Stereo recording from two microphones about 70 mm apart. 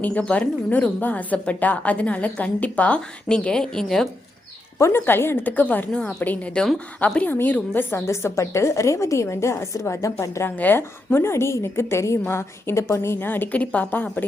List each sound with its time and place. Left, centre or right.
0.0 s a woman's voice: centre
4.8 s a woman's voice: left
5.9 s a woman's voice: centre
8.0 s a woman's voice: left
10.5 s a woman's voice: left
10.8 s a woman's voice: left
13.2 s a woman's voice: left